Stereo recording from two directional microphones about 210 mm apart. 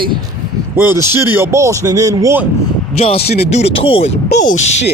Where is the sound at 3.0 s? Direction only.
30° left (ahead or behind).